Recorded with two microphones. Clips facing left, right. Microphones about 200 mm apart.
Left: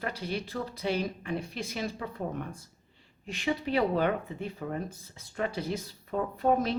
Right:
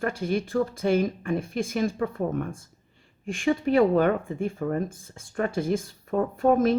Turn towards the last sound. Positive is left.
turn(degrees=-50)  # may be behind; listen again after turning